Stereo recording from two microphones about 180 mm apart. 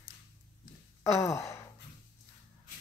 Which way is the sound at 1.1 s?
15° left (ahead or behind).